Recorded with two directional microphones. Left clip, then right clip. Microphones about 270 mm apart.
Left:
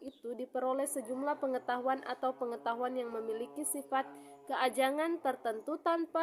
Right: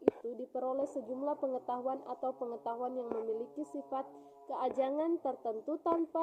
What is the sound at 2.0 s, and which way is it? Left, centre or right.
Speech, left.